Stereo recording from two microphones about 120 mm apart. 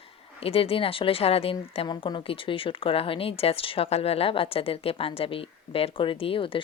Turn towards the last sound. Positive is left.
turn(degrees=45)  # may be behind; listen again after turning